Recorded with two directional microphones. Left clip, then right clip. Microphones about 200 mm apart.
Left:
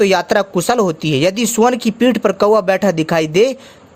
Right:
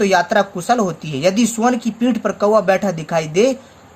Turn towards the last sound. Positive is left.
turn(degrees=45)  # may be behind; listen again after turning